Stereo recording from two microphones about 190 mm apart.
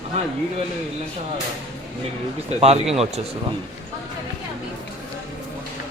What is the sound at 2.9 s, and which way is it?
Speech, 35° right (ahead or behind).